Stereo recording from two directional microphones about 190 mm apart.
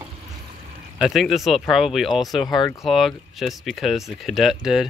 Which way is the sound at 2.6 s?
15° left (ahead or behind).